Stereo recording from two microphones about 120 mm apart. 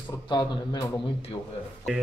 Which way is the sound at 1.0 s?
50° left (ahead or behind).